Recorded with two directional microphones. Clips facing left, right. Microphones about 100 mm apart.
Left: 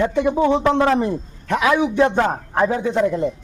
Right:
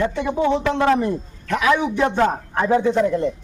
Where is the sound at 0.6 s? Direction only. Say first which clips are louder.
Left 1 dB; 20° left (ahead or behind).